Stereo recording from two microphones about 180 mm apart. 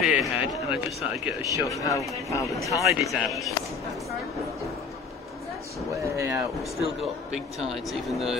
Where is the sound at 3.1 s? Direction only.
Centre (ahead or behind).